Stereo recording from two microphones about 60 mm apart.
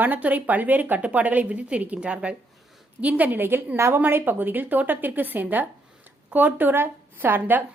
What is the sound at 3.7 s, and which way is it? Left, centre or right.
Speech, right.